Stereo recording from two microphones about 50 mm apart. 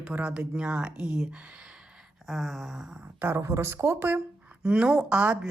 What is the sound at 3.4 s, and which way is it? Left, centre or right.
Speech, right.